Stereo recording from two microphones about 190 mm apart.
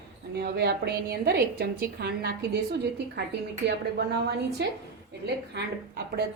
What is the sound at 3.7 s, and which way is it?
A woman's voice, 60° right (ahead or behind).